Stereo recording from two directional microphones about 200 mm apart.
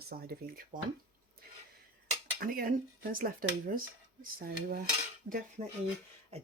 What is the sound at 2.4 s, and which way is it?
Speech, 45° right (ahead or behind).